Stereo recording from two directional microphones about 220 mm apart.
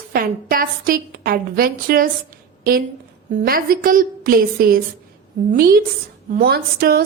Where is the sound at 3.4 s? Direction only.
40° right (ahead or behind).